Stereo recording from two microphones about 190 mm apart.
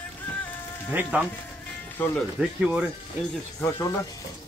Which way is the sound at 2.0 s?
10° left (ahead or behind).